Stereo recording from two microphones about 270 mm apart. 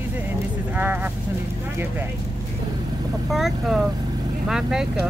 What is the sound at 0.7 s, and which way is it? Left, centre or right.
Speech, centre.